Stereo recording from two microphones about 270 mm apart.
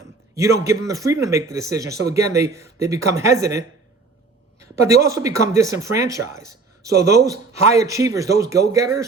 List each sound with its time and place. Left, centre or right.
0.3 s speech: centre
4.7 s speech: centre